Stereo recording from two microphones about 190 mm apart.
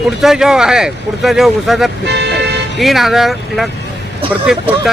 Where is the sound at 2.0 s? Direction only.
60° right (ahead or behind).